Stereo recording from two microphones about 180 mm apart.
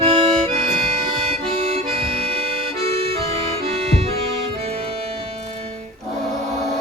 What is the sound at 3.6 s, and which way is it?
Music, 35° right (ahead or behind).